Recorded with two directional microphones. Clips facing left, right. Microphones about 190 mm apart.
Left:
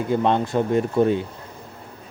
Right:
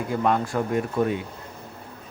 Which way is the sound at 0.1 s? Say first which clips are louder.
Left 3 dB; 25° left (ahead or behind).